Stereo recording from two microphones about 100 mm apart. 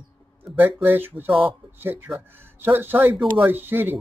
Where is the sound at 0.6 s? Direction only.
20° right (ahead or behind).